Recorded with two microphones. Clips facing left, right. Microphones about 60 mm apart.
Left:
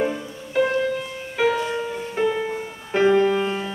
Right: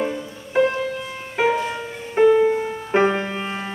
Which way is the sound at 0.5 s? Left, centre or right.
Right.